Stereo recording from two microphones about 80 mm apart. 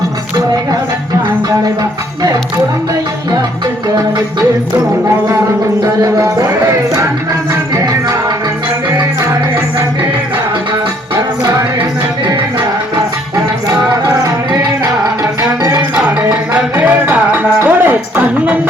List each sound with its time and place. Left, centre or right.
5.8 s music: right
14.0 s music: right
16.7 s music: right
17.6 s music: right